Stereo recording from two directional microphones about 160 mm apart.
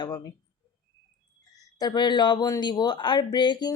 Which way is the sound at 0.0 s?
25° left (ahead or behind).